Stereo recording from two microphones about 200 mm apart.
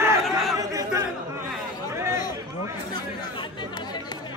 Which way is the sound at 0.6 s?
15° right (ahead or behind).